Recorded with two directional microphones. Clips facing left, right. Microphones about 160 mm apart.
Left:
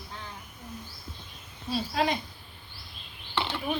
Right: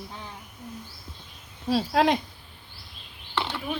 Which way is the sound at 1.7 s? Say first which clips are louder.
Right 6 dB; 90° right.